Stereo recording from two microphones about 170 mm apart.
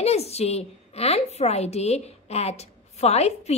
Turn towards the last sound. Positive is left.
turn(degrees=40)  # may be behind; listen again after turning